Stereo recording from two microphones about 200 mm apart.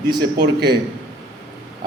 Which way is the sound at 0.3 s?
55° right (ahead or behind).